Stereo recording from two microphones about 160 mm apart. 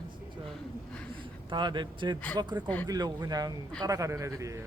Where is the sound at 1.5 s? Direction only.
30° right (ahead or behind).